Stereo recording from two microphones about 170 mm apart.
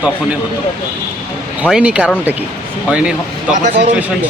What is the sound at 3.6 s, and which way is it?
Speech, 50° right (ahead or behind).